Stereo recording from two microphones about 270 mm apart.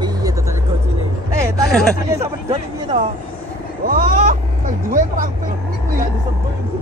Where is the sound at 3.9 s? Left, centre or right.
Right.